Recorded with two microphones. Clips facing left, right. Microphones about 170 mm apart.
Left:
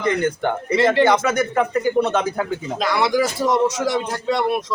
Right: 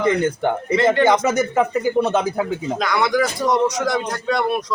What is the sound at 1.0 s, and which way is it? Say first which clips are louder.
A man's voice: right 1 dB; 15° right (ahead or behind).